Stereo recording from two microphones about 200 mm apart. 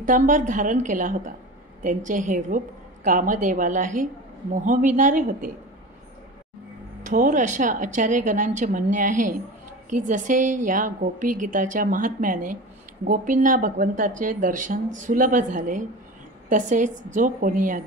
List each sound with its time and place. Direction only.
0.0 s a woman's voice: 40° right (ahead or behind)
7.1 s a woman's voice: 40° right (ahead or behind)